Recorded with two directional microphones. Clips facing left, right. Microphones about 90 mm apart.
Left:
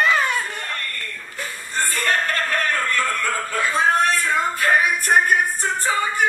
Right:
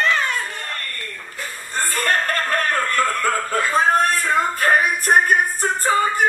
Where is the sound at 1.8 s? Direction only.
45° right (ahead or behind).